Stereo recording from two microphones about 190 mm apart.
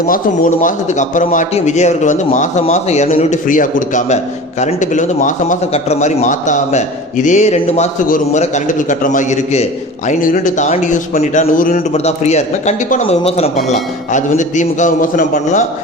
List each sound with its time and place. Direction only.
0.0 s a man's voice: 45° left (ahead or behind)